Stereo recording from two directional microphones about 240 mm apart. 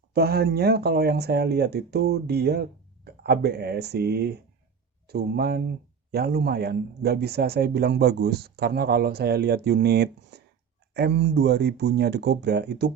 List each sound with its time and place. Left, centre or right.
0.1 s speech: right